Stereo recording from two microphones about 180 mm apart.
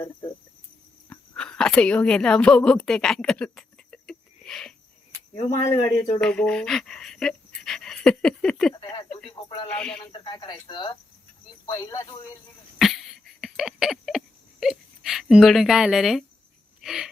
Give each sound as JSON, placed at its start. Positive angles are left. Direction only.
{"t": 1.1, "sound": "a sound", "side_deg": 5}
{"t": 5.7, "sound": "speech", "side_deg": 20}
{"t": 6.1, "sound": "speech", "side_deg": 5}
{"t": 9.7, "sound": "speech", "side_deg": 5}
{"t": 10.1, "sound": "speech", "side_deg": 25}
{"t": 12.8, "sound": "a sound", "side_deg": 0}
{"t": 16.8, "sound": "wheeze", "side_deg": 0}